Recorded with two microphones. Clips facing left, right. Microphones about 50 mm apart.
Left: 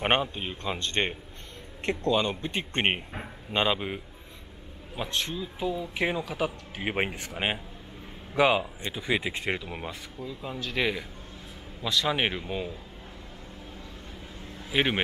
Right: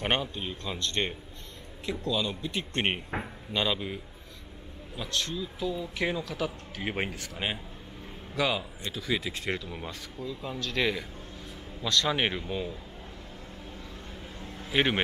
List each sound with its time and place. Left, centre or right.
0.0 s speech: left
2.0 s speech: left
2.7 s speech: left
9.8 s speech: centre
14.7 s speech: centre